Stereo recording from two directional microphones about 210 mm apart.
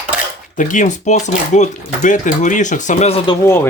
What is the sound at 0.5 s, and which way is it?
Speech, 35° left (ahead or behind).